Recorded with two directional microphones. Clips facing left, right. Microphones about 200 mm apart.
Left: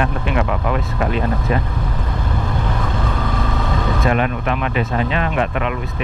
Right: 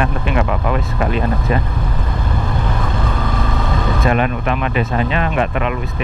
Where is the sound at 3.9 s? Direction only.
15° right (ahead or behind).